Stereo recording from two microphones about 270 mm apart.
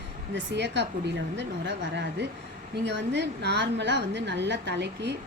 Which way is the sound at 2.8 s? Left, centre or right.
Right.